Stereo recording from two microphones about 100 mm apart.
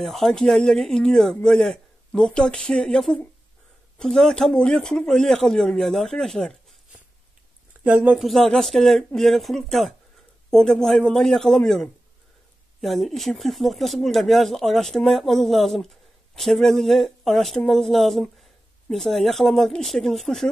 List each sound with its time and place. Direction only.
0.0 s speech: centre (ahead or behind)
7.8 s speech: 15° right (ahead or behind)
8.2 s speech: centre (ahead or behind)